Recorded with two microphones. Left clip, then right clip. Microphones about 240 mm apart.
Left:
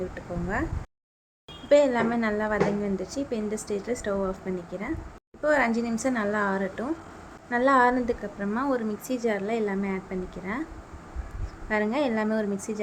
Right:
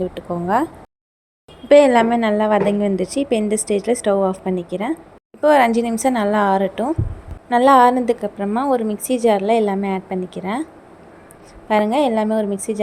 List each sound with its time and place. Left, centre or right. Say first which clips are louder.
0.1 s a woman's voice: right 12 dB; right
1.7 s a woman's voice: right 10 dB; right
11.7 s a woman's voice: right 10 dB; centre